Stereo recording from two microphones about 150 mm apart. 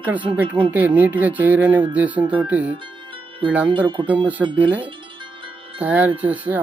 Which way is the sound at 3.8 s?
30° right (ahead or behind).